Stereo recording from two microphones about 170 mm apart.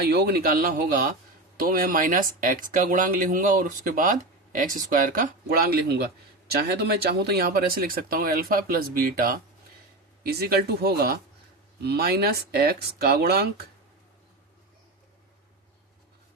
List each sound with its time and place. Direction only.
0.0 s speech: 70° right (ahead or behind)